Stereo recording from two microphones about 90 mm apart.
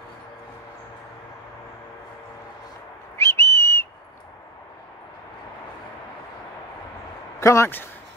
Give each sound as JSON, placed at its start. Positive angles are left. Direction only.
{"t": 3.2, "sound": "whistle", "side_deg": 30}
{"t": 7.3, "sound": "speech", "side_deg": 35}